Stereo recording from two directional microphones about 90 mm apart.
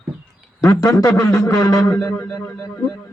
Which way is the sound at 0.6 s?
35° left (ahead or behind).